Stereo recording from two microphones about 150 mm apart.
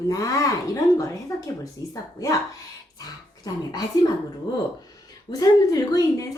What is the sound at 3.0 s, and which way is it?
Speech, 25° left (ahead or behind).